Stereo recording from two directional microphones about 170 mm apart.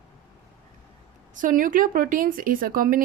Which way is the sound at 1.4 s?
55° right (ahead or behind).